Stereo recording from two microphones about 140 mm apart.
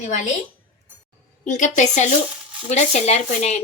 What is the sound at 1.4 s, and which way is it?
Speech, 60° left (ahead or behind).